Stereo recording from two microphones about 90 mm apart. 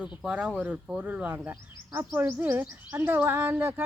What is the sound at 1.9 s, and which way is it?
Speech, 30° right (ahead or behind).